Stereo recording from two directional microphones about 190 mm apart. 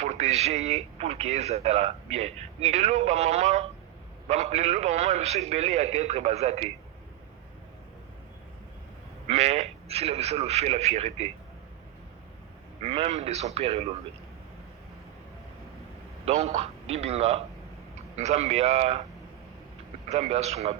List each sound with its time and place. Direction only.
0.0 s speech: 35° right (ahead or behind)
9.2 s speech: 35° right (ahead or behind)
12.8 s speech: 30° right (ahead or behind)
16.2 s speech: 35° right (ahead or behind)
20.1 s speech: 35° right (ahead or behind)